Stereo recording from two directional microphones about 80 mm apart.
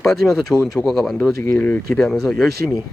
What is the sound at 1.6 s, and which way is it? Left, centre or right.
Speech, centre.